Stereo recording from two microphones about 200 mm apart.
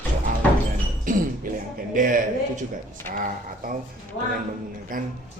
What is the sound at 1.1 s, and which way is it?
Music, 40° right (ahead or behind).